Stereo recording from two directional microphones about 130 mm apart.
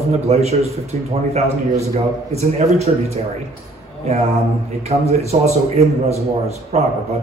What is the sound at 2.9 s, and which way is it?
Speech, 55° right (ahead or behind).